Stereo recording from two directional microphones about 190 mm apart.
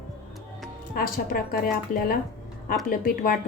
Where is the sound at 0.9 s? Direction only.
50° left (ahead or behind).